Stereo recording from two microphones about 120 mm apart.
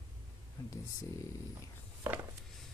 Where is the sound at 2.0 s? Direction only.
20° right (ahead or behind).